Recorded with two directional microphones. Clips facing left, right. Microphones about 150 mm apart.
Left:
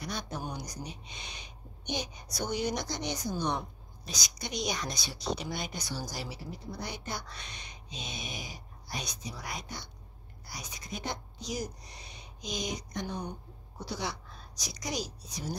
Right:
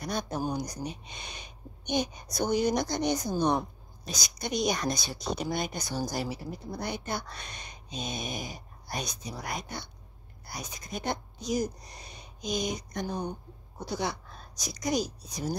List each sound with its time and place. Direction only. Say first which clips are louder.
0.0 s speech: right 5 dB; 45° right (ahead or behind)
0.4 s speech: right 8 dB; 35° right (ahead or behind)
0.7 s a woman's voice: right 5 dB; 50° right (ahead or behind)